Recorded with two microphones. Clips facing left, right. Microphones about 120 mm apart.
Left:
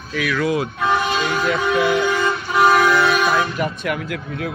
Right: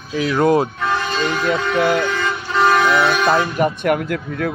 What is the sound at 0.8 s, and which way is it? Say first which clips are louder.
Vehicle: left 2 dB; 25° left (ahead or behind).